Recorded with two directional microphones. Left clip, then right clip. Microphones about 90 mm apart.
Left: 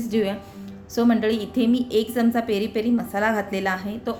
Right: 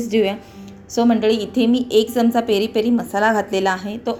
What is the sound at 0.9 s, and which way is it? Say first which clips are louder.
A woman's voice: right 5 dB; 15° right (ahead or behind).